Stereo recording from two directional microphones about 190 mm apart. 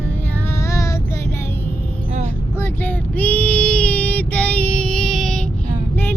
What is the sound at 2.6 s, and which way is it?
Child singing, 10° left (ahead or behind).